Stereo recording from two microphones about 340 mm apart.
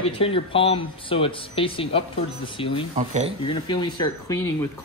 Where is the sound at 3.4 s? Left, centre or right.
Centre.